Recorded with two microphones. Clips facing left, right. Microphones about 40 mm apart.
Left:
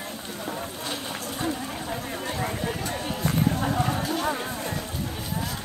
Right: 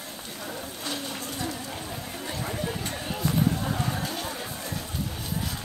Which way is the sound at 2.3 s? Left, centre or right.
Left.